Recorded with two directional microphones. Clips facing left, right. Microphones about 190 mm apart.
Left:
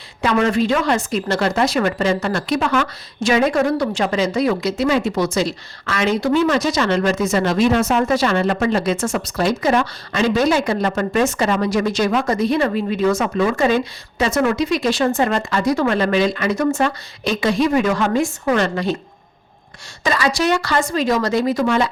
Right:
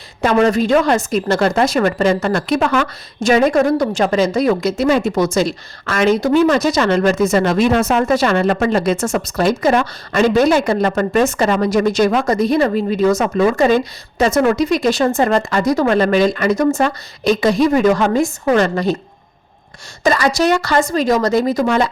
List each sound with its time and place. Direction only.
0.2 s a woman's voice: 40° right (ahead or behind)
20.1 s a woman's voice: 45° right (ahead or behind)